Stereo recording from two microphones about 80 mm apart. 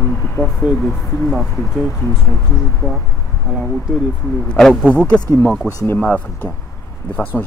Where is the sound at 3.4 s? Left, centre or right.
Centre.